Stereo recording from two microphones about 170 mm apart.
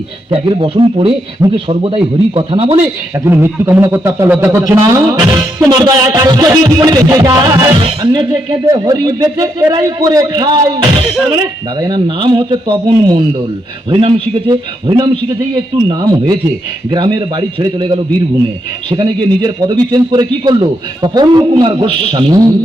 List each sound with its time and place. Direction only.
0.3 s a man's voice: 30° right (ahead or behind)
3.2 s a man's voice: 15° right (ahead or behind)